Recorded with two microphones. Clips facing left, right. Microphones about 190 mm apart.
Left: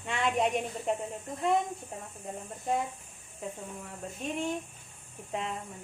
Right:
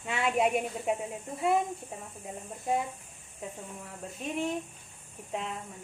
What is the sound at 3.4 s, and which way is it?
Speech, centre (ahead or behind).